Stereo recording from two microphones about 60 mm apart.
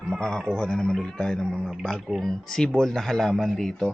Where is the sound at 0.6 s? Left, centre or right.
Centre.